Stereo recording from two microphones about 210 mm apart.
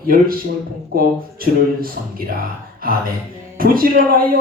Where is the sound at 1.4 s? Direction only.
45° right (ahead or behind).